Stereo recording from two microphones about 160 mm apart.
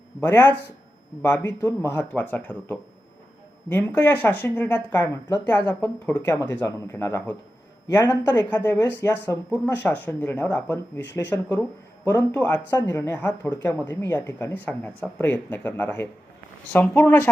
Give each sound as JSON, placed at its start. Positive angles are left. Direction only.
{"t": 0.2, "sound": "speech", "side_deg": 15}